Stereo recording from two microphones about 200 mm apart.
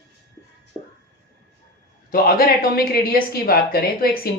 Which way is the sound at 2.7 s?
50° left (ahead or behind).